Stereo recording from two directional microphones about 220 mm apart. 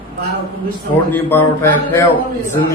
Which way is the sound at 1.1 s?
10° left (ahead or behind).